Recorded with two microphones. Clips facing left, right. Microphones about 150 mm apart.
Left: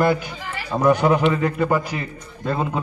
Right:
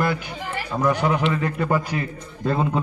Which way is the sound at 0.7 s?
15° left (ahead or behind).